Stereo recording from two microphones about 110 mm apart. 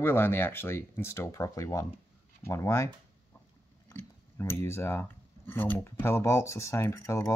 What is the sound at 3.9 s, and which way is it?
Speech, 20° left (ahead or behind).